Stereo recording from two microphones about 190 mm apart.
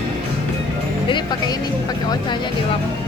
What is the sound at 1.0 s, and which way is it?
Music, 25° left (ahead or behind).